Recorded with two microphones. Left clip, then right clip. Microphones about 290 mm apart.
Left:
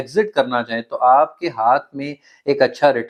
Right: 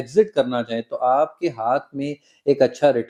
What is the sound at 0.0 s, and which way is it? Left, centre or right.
Speech, left.